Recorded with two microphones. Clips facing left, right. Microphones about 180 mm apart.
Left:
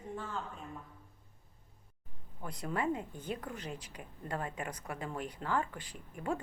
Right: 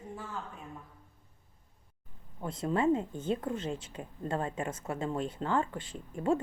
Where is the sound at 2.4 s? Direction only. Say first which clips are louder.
Right 6 dB; 25° right (ahead or behind).